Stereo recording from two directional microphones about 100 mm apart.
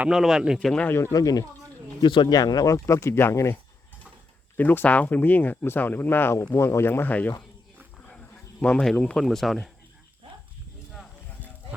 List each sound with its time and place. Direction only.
0.1 s speech: 5° right (ahead or behind)
0.9 s speech: 25° left (ahead or behind)
1.1 s speech: 40° left (ahead or behind)
2.0 s speech: 55° left (ahead or behind)
2.3 s speech: 40° left (ahead or behind); by 9.7 s centre (ahead or behind)